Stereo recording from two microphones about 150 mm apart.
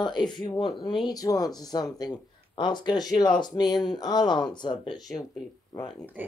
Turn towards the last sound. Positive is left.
turn(degrees=-10)  # may be behind; listen again after turning